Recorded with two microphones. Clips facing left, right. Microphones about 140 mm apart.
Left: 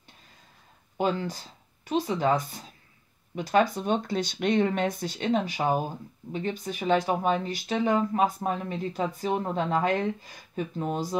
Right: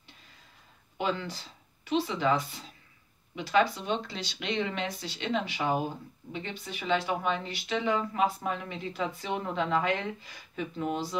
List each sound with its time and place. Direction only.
0.9 s speech: 40° left (ahead or behind)